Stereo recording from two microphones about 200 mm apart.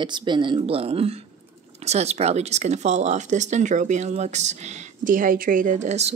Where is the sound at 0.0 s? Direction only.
20° right (ahead or behind).